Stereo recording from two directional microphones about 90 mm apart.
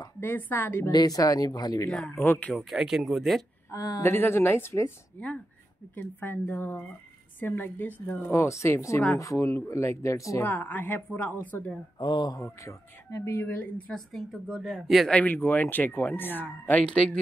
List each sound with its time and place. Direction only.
0.2 s a woman's voice: 20° left (ahead or behind)
0.9 s speech: 45° left (ahead or behind)
2.0 s a woman's voice: 25° left (ahead or behind)
2.5 s speech: 5° right (ahead or behind)
3.7 s speech: 45° left (ahead or behind)
4.0 s a woman's voice: 25° left (ahead or behind)
5.9 s a woman's voice: 20° left (ahead or behind)
8.3 s speech: 30° left (ahead or behind)
10.4 s a woman's voice: 20° left (ahead or behind)
12.0 s speech: 55° left (ahead or behind)
12.4 s a woman's voice: 35° left (ahead or behind); by 13.9 s 20° left (ahead or behind)
13.9 s speech: 5° left (ahead or behind)
15.0 s a woman's voice: 15° left (ahead or behind)